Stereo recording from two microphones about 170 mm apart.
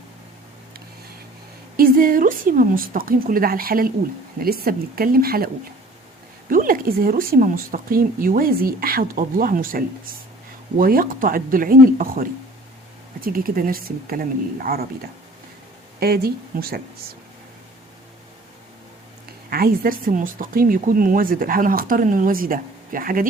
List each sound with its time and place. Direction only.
1.7 s speech: 60° right (ahead or behind)
6.5 s speech: 55° right (ahead or behind)
16.0 s speech: 65° right (ahead or behind)
19.5 s speech: 60° right (ahead or behind)